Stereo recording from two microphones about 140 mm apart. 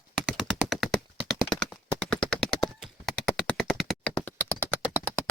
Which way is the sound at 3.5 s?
5° left (ahead or behind).